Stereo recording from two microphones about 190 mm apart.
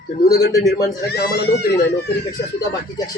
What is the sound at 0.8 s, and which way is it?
Speech, 20° left (ahead or behind).